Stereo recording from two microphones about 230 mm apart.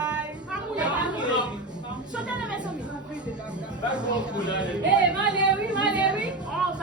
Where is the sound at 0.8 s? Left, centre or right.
Centre.